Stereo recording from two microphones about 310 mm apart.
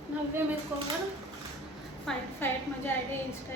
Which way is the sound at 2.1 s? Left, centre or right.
Centre.